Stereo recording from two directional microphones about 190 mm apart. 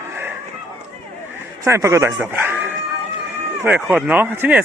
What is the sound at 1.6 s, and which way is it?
Speech, 15° right (ahead or behind).